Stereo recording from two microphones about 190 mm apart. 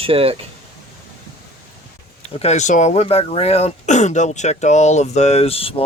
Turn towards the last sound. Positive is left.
turn(degrees=30)  # may be behind; listen again after turning